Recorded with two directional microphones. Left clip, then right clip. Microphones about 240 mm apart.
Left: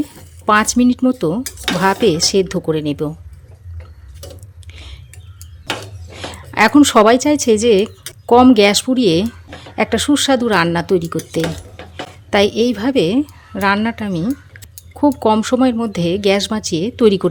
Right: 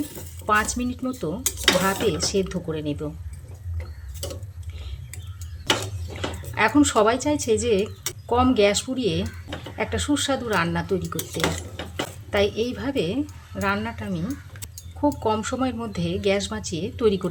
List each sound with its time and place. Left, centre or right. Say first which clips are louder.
0.4 s speech: left 9 dB; left
6.5 s speech: left 9 dB; left
12.3 s speech: left 9 dB; left